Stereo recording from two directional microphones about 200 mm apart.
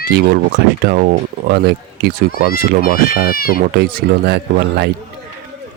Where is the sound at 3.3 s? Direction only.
45° left (ahead or behind).